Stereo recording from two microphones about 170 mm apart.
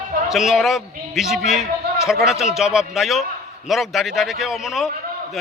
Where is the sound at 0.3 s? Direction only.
Centre (ahead or behind).